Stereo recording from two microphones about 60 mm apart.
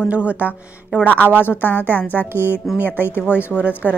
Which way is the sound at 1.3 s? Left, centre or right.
Left.